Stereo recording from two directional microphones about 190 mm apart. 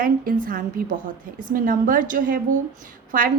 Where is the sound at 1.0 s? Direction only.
45° right (ahead or behind).